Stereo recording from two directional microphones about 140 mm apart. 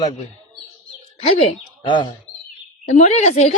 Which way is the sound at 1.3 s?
45° left (ahead or behind).